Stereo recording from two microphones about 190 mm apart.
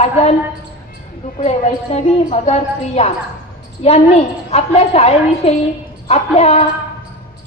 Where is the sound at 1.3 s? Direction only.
35° left (ahead or behind).